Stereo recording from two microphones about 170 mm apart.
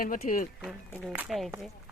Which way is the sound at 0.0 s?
55° left (ahead or behind).